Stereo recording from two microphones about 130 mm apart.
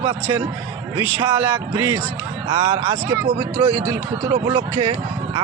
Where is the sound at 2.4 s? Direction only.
40° right (ahead or behind).